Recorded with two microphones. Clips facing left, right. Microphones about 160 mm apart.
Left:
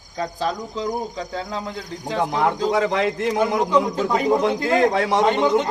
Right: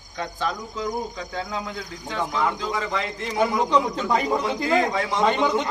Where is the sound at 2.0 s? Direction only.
35° left (ahead or behind).